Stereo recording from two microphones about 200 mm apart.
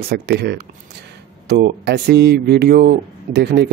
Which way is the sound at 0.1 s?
55° right (ahead or behind).